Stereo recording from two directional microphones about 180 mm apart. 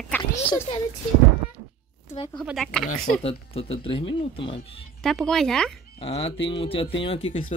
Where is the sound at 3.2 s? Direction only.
30° left (ahead or behind).